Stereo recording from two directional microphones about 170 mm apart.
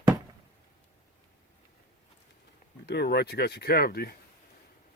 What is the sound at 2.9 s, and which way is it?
Speech, 75° left (ahead or behind).